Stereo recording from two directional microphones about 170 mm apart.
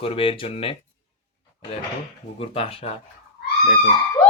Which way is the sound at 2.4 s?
35° left (ahead or behind).